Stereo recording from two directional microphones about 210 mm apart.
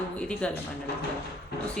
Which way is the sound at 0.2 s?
5° left (ahead or behind).